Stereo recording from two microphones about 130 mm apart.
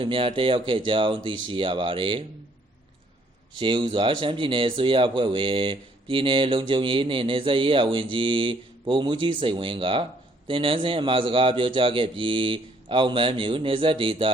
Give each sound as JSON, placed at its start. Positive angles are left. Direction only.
{"t": 0.0, "sound": "speech", "side_deg": -40}
{"t": 3.6, "sound": "speech", "side_deg": -40}